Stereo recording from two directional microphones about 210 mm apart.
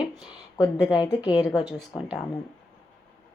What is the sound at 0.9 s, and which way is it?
Speech, 20° left (ahead or behind).